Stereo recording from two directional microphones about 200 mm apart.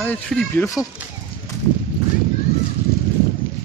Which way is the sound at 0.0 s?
5° left (ahead or behind).